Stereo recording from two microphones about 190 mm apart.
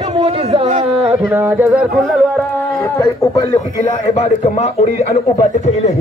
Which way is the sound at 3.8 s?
35° left (ahead or behind).